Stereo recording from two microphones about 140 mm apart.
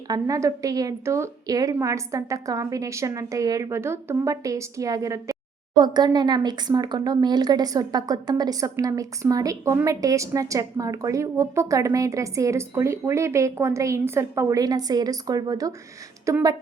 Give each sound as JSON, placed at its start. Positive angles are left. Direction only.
{"t": 0.1, "sound": "a woman's voice", "side_deg": -25}